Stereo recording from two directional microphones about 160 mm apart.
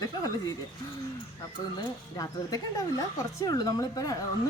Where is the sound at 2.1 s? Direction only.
20° left (ahead or behind).